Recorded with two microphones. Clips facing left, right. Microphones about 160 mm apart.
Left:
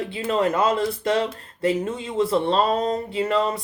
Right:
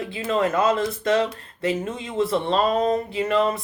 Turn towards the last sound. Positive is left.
turn(degrees=30)  # may be behind; listen again after turning